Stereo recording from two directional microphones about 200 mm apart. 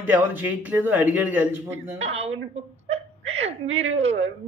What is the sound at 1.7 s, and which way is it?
Speech, 30° right (ahead or behind).